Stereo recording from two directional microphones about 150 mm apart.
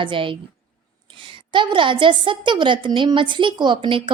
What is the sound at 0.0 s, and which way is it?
Speech, 35° right (ahead or behind).